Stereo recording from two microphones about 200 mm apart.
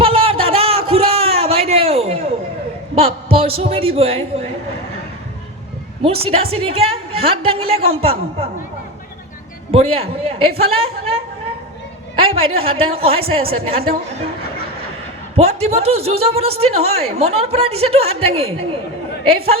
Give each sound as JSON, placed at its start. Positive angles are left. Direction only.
{"t": 0.0, "sound": "a sound", "side_deg": -30}
{"t": 2.9, "sound": "a man's voice", "side_deg": -30}
{"t": 6.0, "sound": "a woman's voice", "side_deg": -30}
{"t": 9.7, "sound": "a woman's voice", "side_deg": -30}
{"t": 12.1, "sound": "a sound", "side_deg": -30}
{"t": 12.5, "sound": "a woman's voice", "side_deg": -30}
{"t": 15.4, "sound": "a woman's voice", "side_deg": -30}